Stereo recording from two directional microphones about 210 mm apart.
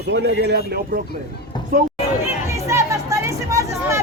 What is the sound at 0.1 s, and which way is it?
Speech, 55° right (ahead or behind).